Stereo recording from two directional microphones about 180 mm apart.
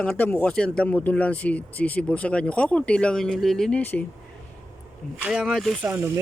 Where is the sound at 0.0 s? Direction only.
10° left (ahead or behind).